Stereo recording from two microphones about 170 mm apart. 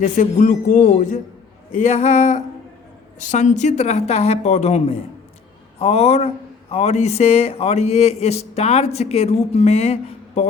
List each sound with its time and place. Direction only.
0.0 s a man's voice: 50° left (ahead or behind)